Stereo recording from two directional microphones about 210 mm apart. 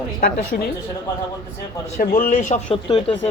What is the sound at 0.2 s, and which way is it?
Speech, 45° left (ahead or behind).